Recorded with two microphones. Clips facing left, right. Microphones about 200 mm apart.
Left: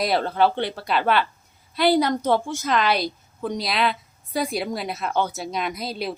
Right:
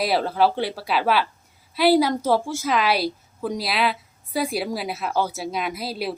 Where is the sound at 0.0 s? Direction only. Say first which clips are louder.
Even; 5° right (ahead or behind).